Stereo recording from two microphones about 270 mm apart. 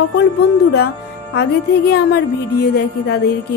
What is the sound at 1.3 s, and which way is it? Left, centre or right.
Speech, left.